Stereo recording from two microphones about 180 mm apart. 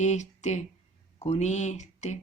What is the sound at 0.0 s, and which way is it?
Speech, 40° left (ahead or behind).